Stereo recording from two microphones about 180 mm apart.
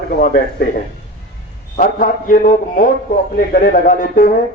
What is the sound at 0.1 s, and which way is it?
A man's voice, 50° left (ahead or behind).